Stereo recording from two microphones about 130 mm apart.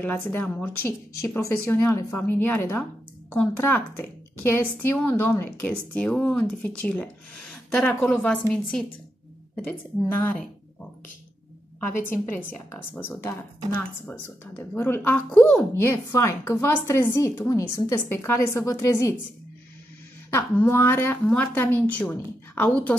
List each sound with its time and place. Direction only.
0.0 s speech: 15° left (ahead or behind)
12.1 s speech: 15° left (ahead or behind)
15.7 s a woman's voice: 20° left (ahead or behind)
20.2 s speech: 15° left (ahead or behind)